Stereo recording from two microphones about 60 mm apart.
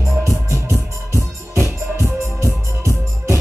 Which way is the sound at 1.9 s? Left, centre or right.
Right.